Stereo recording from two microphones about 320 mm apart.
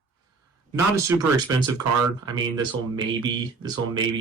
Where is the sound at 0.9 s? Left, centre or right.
Centre.